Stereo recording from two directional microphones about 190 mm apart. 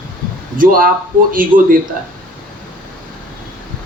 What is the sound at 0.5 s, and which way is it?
A man's voice, 50° right (ahead or behind).